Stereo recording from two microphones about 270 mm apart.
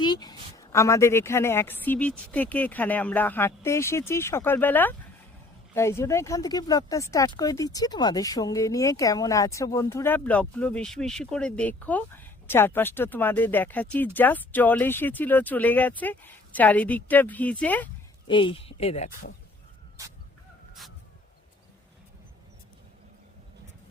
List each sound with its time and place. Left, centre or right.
0.0 s speech: centre
18.3 s speech: centre